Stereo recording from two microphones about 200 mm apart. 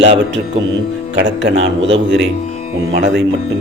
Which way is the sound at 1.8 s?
70° right (ahead or behind).